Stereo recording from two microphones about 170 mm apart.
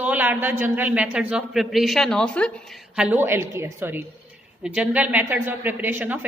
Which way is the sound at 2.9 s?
5° right (ahead or behind).